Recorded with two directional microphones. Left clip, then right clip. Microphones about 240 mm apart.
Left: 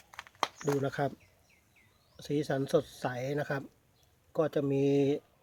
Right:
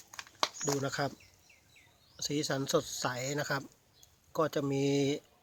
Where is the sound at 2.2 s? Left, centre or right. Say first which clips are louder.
Left 1 dB; centre.